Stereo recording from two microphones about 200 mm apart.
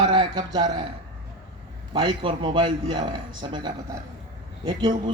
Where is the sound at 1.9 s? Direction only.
25° right (ahead or behind).